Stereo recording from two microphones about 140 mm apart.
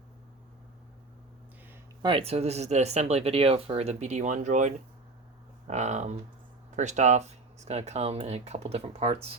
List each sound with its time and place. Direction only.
2.0 s speech: 35° right (ahead or behind)